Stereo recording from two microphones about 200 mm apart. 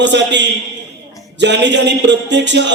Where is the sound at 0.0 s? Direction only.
60° right (ahead or behind).